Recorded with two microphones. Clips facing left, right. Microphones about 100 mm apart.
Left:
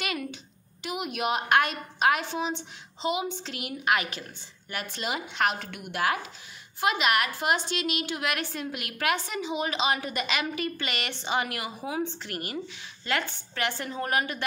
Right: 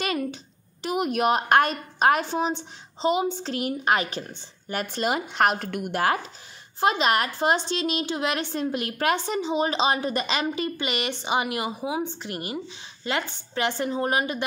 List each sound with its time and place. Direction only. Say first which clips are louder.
0.0 s a sound: right 6 dB; 35° right (ahead or behind)
0.8 s a woman's voice: right 7 dB; 40° right (ahead or behind)
4.7 s a woman's voice: right 6 dB; 45° right (ahead or behind); by 14.4 s 20° right (ahead or behind)